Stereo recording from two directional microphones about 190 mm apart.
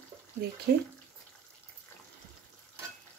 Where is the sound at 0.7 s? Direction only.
55° right (ahead or behind).